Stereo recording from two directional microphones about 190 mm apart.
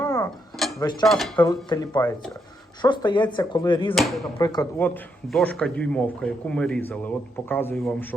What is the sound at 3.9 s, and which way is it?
Dishes, centre (ahead or behind).